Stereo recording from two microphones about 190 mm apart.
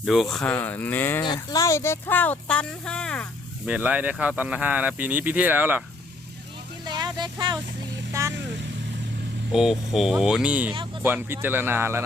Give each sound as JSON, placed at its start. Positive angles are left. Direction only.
{"t": 0.0, "sound": "speech", "side_deg": 0}
{"t": 1.2, "sound": "speech", "side_deg": 20}
{"t": 3.7, "sound": "speech", "side_deg": -10}
{"t": 6.8, "sound": "a sound", "side_deg": -20}
{"t": 8.1, "sound": "vehicle", "side_deg": -15}
{"t": 9.5, "sound": "speech", "side_deg": 0}